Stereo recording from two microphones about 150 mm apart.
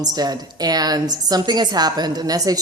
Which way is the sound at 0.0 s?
25° right (ahead or behind).